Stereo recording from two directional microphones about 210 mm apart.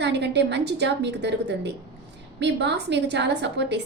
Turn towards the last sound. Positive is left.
turn(degrees=-55)  # may be behind; listen again after turning